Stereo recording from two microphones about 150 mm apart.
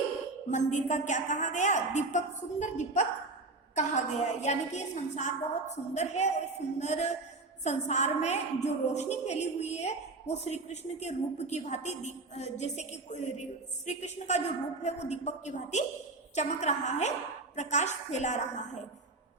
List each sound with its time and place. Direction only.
0.5 s a woman's voice: 55° left (ahead or behind)